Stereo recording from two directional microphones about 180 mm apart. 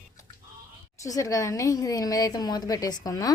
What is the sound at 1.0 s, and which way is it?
A woman's voice, 20° left (ahead or behind).